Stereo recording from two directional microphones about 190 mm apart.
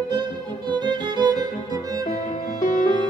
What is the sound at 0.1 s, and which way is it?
Music, 25° right (ahead or behind).